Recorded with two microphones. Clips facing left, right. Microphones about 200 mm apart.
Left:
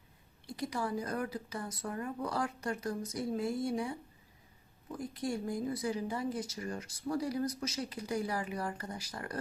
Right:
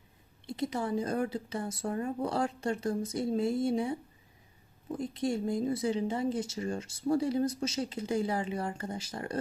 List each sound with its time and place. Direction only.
0.4 s speech: 25° right (ahead or behind)